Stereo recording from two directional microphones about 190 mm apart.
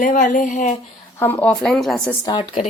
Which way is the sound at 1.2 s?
10° left (ahead or behind).